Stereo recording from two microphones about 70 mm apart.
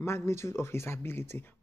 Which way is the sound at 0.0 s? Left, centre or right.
Left.